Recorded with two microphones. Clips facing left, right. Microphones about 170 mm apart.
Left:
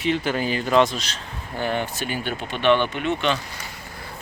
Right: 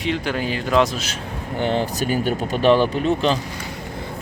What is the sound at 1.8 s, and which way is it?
Speech, 40° right (ahead or behind).